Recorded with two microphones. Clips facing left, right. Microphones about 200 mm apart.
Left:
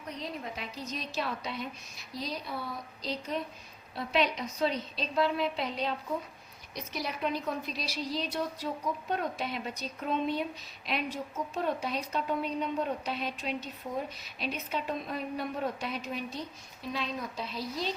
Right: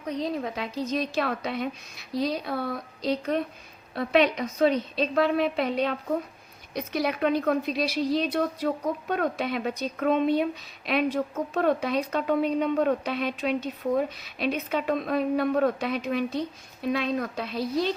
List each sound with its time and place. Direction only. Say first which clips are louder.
0.0 s a woman's voice: right 10 dB; 90° right; by 17.8 s 60° right (ahead or behind)